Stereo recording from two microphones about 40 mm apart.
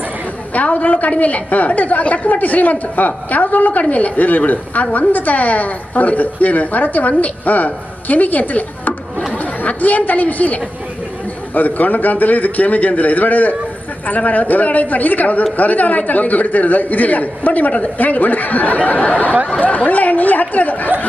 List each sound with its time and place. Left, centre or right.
0.5 s a woman's voice: left